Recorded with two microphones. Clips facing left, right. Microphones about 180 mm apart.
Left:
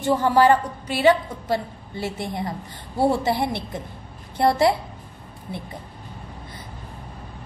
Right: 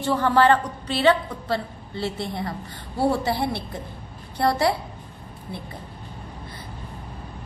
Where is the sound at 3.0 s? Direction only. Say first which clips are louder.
Left 2 dB; 20° left (ahead or behind).